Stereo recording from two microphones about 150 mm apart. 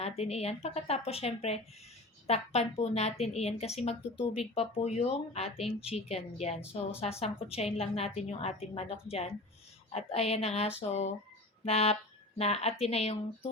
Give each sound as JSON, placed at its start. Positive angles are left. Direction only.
{"t": 0.0, "sound": "a woman's voice", "side_deg": 45}